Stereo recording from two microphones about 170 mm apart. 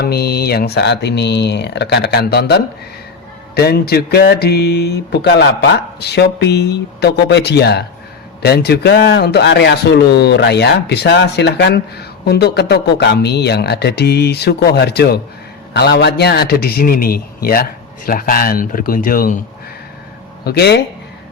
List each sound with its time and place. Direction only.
0.0 s a man's voice: 65° left (ahead or behind)
20.4 s speech: 70° left (ahead or behind)